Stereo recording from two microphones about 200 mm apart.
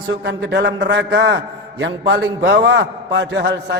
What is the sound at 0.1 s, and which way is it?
A man's voice, 60° right (ahead or behind).